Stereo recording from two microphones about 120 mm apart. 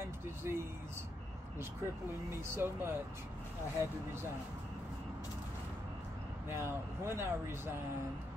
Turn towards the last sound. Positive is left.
turn(degrees=-20)  # may be behind; listen again after turning